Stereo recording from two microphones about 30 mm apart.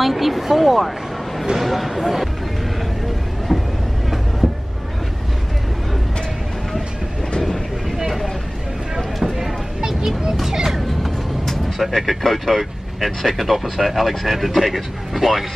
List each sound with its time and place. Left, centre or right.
0.0 s speech: centre
3.5 s vehicle: centre
8.9 s a sound: centre
11.4 s speech: centre